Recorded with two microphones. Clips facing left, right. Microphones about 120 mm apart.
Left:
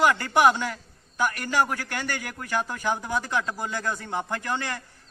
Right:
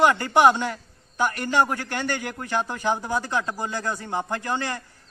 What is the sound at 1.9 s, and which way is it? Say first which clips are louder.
A man's voice: right 4 dB; 20° right (ahead or behind).